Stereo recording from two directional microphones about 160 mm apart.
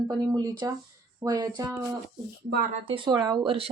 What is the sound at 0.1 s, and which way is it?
Speech, 25° right (ahead or behind).